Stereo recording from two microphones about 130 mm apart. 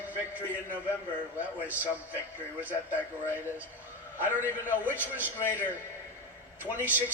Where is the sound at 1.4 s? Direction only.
10° right (ahead or behind).